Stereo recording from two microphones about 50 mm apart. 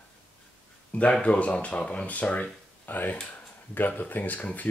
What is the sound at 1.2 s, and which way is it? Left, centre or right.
Speech, left.